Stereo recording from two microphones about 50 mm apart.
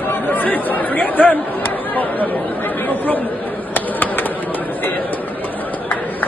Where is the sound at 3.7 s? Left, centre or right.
Left.